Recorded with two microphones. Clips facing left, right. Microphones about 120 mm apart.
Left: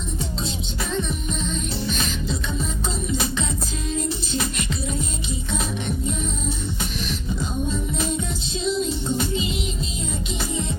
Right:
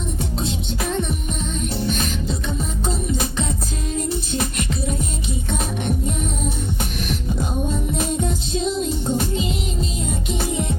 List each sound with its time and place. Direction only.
0.9 s music: 55° right (ahead or behind)
7.1 s music: 50° right (ahead or behind)